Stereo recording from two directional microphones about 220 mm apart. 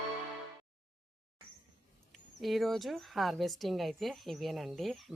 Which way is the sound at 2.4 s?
Centre (ahead or behind).